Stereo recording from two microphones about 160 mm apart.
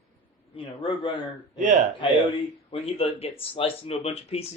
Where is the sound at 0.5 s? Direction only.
30° left (ahead or behind).